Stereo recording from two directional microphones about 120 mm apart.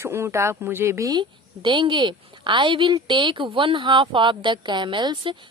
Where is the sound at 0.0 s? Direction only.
20° right (ahead or behind).